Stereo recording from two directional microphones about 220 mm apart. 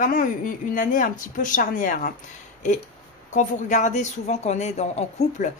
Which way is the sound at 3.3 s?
35° left (ahead or behind).